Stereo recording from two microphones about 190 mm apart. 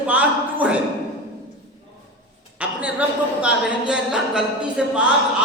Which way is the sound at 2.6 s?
5° right (ahead or behind).